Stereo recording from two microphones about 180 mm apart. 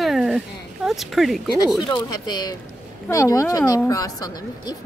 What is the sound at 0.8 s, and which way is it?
Speech, centre (ahead or behind).